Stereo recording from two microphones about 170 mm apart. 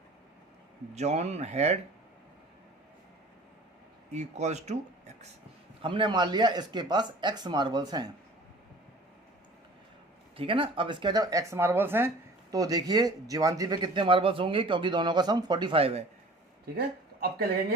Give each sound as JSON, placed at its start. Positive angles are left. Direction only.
{"t": 0.9, "sound": "speech", "side_deg": -40}
{"t": 4.1, "sound": "speech", "side_deg": -40}
{"t": 5.8, "sound": "speech", "side_deg": -30}
{"t": 10.3, "sound": "speech", "side_deg": -30}
{"t": 16.7, "sound": "speech", "side_deg": -65}